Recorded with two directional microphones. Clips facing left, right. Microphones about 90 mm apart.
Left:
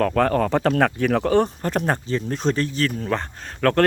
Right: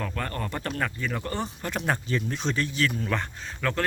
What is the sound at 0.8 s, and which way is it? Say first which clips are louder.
Speech: left 11 dB; 75° left (ahead or behind).